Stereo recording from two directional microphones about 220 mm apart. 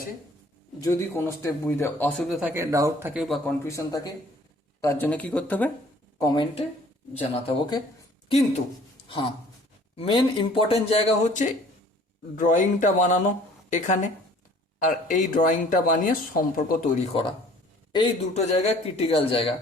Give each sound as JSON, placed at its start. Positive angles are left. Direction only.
{"t": 0.8, "sound": "speech", "side_deg": 15}
{"t": 3.7, "sound": "speech", "side_deg": 15}
{"t": 6.1, "sound": "speech", "side_deg": 20}
{"t": 9.0, "sound": "speech", "side_deg": 25}